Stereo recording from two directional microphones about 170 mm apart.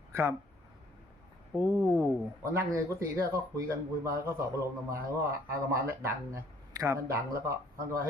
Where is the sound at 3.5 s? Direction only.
20° right (ahead or behind).